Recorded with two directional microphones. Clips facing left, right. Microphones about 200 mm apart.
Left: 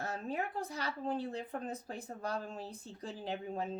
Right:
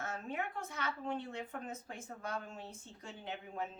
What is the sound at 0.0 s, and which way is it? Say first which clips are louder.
A woman's voice: left 3 dB; 35° left (ahead or behind).